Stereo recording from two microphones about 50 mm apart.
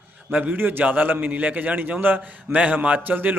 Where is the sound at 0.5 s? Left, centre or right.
Right.